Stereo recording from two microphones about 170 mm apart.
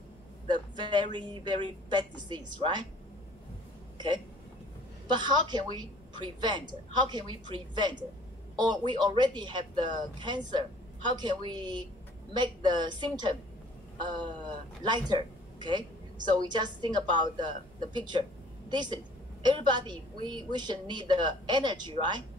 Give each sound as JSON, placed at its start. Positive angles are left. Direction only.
{"t": 0.5, "sound": "a woman's voice", "side_deg": -25}
{"t": 5.0, "sound": "speech", "side_deg": -25}
{"t": 16.3, "sound": "a woman's voice", "side_deg": -25}